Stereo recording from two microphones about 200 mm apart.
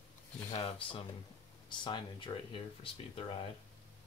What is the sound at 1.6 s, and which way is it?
Speech, 25° left (ahead or behind).